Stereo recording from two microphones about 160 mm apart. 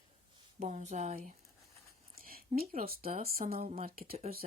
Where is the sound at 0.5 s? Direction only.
50° right (ahead or behind).